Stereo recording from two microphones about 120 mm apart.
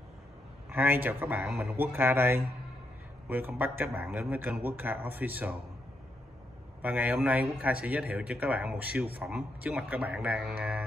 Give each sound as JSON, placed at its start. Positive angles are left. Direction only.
{"t": 0.7, "sound": "a man's voice", "side_deg": -15}
{"t": 6.8, "sound": "speech", "side_deg": -15}